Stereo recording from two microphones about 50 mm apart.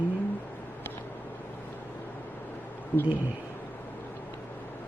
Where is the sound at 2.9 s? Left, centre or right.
Left.